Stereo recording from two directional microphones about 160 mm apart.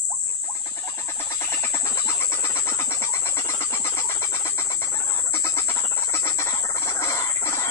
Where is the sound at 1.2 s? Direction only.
15° left (ahead or behind).